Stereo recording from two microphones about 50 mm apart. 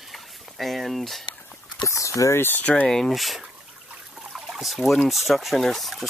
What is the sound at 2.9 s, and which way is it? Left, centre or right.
Speech, centre.